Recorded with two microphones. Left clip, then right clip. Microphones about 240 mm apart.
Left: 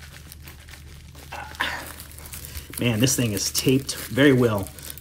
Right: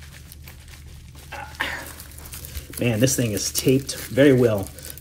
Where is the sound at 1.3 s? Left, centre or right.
Centre.